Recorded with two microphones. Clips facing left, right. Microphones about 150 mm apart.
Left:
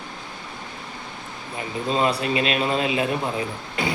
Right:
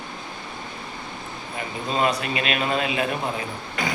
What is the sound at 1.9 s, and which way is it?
A man's voice, 30° left (ahead or behind).